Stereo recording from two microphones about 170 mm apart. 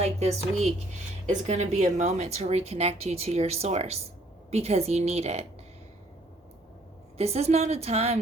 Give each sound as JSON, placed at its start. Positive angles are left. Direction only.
{"t": 0.0, "sound": "a woman's voice", "side_deg": -40}
{"t": 7.2, "sound": "a woman's voice", "side_deg": -40}